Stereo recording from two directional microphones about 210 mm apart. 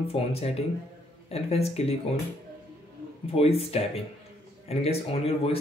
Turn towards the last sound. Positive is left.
turn(degrees=30)  # may be behind; listen again after turning